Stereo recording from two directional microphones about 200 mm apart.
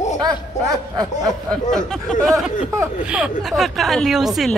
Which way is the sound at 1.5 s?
Centre (ahead or behind).